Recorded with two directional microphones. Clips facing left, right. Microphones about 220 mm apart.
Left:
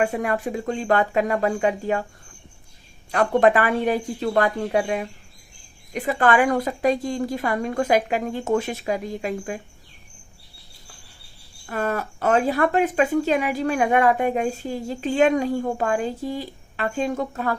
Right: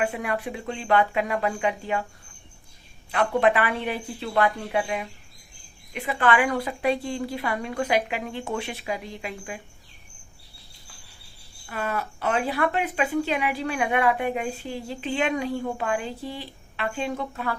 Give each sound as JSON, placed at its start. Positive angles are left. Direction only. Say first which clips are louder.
{"t": 0.0, "sound": "speech", "louder": "left 4 dB", "side_deg": 45}
{"t": 3.1, "sound": "speech", "louder": "left 4 dB", "side_deg": 45}
{"t": 11.6, "sound": "speech", "louder": "left 4 dB", "side_deg": 45}